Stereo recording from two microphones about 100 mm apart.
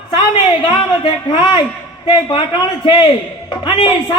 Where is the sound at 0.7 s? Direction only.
50° left (ahead or behind).